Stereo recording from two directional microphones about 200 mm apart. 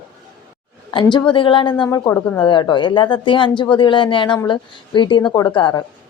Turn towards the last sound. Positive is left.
turn(degrees=20)  # may be behind; listen again after turning